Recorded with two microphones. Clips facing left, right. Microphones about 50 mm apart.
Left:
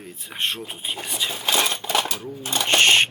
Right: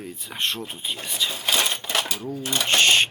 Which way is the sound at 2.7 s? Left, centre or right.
Left.